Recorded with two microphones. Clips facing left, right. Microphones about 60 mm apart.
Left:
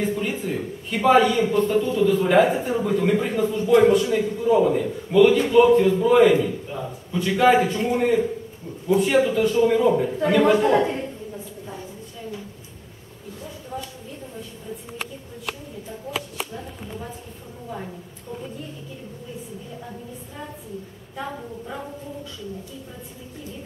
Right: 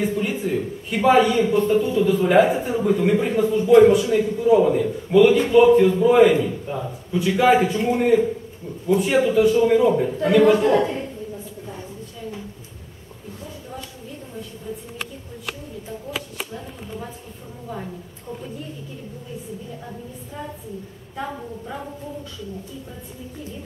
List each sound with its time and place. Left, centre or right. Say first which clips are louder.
0.2 s a man's voice: right 3 dB; centre
10.6 s a woman's voice: right 1 dB; centre